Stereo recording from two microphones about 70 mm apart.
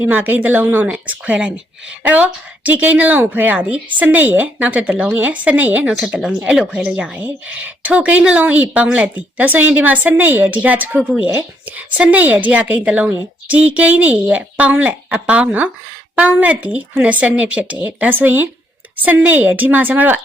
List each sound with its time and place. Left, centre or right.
0.0 s speech: right
5.9 s speech: centre